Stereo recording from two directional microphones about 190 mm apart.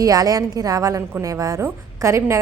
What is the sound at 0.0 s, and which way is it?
A woman's voice, 20° right (ahead or behind).